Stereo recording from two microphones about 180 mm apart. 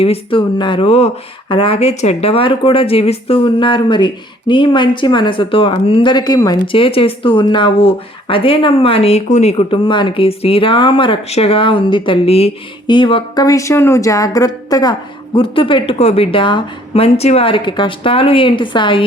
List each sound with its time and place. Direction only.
0.0 s speech: 30° left (ahead or behind)